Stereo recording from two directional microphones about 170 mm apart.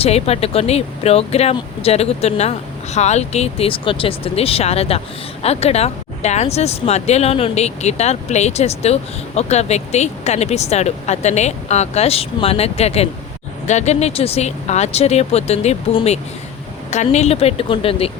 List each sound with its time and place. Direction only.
0.0 s speech: 35° left (ahead or behind)